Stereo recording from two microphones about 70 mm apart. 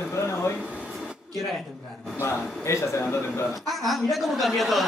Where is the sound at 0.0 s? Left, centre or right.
Left.